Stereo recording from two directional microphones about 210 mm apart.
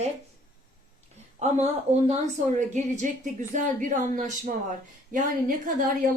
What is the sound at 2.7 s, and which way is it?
A woman's voice, 35° right (ahead or behind).